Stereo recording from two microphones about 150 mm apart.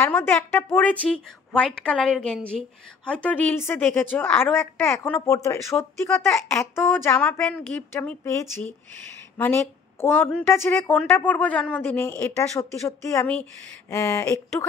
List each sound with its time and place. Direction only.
0.0 s a woman's voice: 15° left (ahead or behind)